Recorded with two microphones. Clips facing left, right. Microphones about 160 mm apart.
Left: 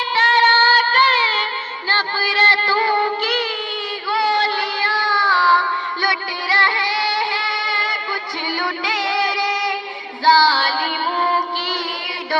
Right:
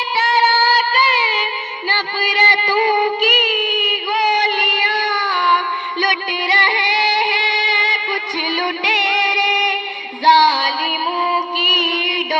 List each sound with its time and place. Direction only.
0.2 s music of bollywood: 10° right (ahead or behind)
8.4 s music: 20° right (ahead or behind)